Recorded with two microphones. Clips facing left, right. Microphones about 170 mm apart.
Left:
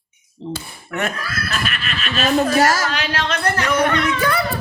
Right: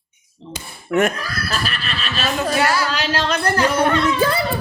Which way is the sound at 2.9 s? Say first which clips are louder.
Right 2 dB; 40° right (ahead or behind).